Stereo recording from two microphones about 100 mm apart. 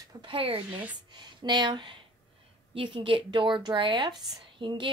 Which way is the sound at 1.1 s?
50° right (ahead or behind).